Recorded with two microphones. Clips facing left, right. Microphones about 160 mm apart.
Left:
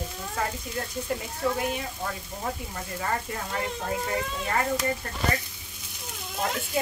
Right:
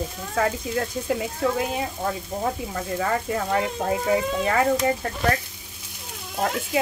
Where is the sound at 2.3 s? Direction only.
90° right.